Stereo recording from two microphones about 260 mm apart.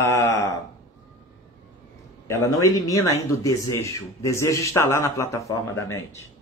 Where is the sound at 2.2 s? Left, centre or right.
Centre.